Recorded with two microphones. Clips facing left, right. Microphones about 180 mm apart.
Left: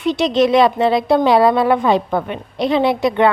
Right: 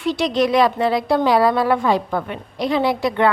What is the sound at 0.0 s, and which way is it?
Speech, 20° left (ahead or behind).